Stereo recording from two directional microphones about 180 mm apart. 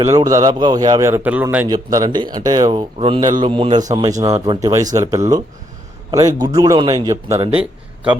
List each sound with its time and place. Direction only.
0.0 s speech: 20° right (ahead or behind)
1.6 s speech: 20° right (ahead or behind)
7.3 s speech: 30° right (ahead or behind)
7.6 s speech: 5° right (ahead or behind)